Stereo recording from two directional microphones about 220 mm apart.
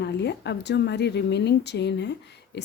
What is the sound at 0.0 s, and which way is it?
A woman's voice, 50° left (ahead or behind).